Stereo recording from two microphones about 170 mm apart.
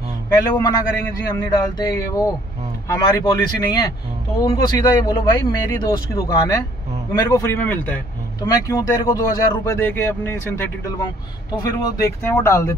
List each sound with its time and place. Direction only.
0.3 s a man's voice: 20° left (ahead or behind)